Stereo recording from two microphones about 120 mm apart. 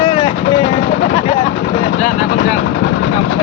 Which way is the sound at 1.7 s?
90° left.